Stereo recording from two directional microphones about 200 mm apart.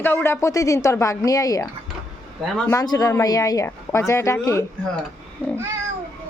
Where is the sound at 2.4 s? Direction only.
Centre (ahead or behind).